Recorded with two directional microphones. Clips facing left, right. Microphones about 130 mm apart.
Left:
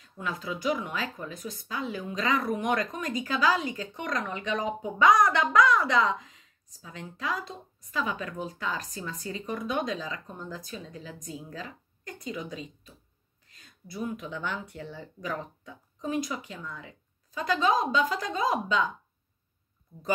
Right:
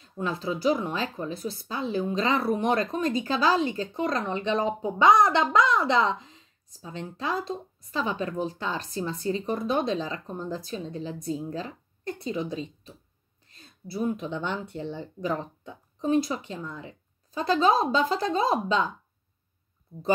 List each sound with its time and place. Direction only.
0.2 s speech: 30° right (ahead or behind)